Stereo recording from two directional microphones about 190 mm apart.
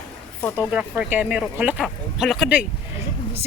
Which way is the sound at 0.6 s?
5° right (ahead or behind).